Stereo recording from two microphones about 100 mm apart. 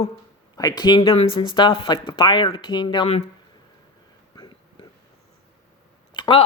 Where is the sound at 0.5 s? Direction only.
40° left (ahead or behind).